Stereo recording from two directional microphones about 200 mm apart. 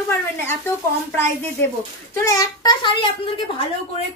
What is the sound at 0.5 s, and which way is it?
A woman's voice, 10° left (ahead or behind).